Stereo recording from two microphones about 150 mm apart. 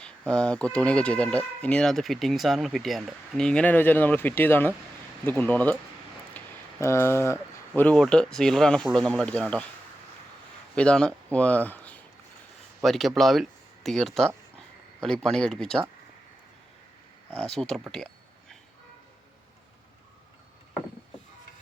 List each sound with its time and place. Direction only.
0.0 s speech: 5° left (ahead or behind)
6.3 s a sound: 15° left (ahead or behind)
7.7 s speech: 5° left (ahead or behind)
10.8 s speech: 5° left (ahead or behind)
17.3 s speech: 5° left (ahead or behind)
17.9 s a sound: 5° left (ahead or behind)